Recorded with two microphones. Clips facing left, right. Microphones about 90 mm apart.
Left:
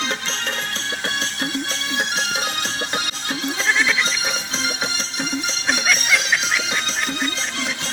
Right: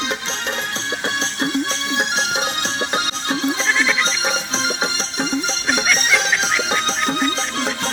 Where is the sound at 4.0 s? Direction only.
25° right (ahead or behind).